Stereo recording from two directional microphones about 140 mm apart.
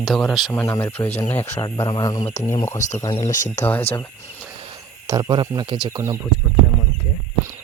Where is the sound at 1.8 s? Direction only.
30° left (ahead or behind).